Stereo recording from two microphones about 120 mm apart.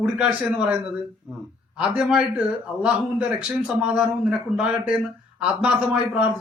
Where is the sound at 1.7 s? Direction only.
10° right (ahead or behind).